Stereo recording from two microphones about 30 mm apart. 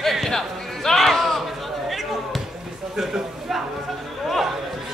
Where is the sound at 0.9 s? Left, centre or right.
Centre.